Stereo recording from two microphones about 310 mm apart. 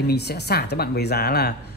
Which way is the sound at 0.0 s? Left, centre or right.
Left.